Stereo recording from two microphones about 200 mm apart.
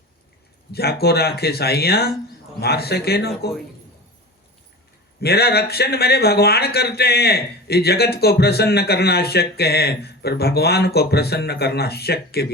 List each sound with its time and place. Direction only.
0.7 s speech: 50° left (ahead or behind)
5.2 s speech: 55° left (ahead or behind)